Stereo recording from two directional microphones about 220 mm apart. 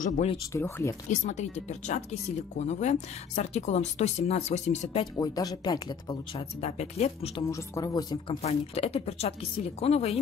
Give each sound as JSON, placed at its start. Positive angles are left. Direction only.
{"t": 0.0, "sound": "speech", "side_deg": 30}
{"t": 0.5, "sound": "speech", "side_deg": 10}
{"t": 1.2, "sound": "speech", "side_deg": 30}
{"t": 5.1, "sound": "speech", "side_deg": 15}
{"t": 7.5, "sound": "speech", "side_deg": 15}